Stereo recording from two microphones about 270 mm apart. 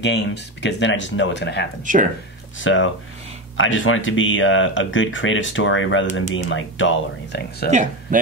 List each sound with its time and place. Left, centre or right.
0.0 s speech: left
1.9 s speech: right
2.6 s speech: left
7.7 s speech: right